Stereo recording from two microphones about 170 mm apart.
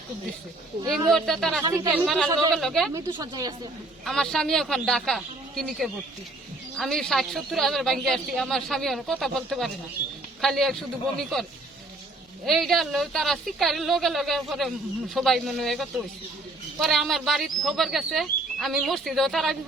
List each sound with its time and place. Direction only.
0.9 s speech: centre (ahead or behind)
1.6 s speech: 25° right (ahead or behind)
1.9 s speech: 10° right (ahead or behind)
2.9 s speech: 25° right (ahead or behind)
4.0 s speech: centre (ahead or behind)
12.5 s speech: centre (ahead or behind)